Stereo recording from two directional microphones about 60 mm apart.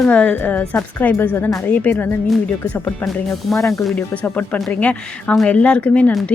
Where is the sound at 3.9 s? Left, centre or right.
Left.